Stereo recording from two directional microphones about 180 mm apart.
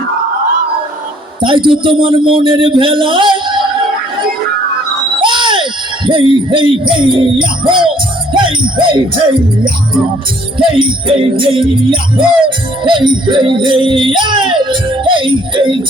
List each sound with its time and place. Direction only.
1.4 s a man's voice: 25° right (ahead or behind)
5.2 s a sound: 25° right (ahead or behind)
6.1 s music: 30° right (ahead or behind)
8.3 s music: 25° right (ahead or behind)
10.6 s music: 30° right (ahead or behind)